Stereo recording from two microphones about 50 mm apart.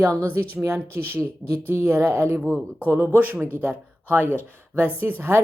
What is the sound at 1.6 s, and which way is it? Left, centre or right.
Speech, right.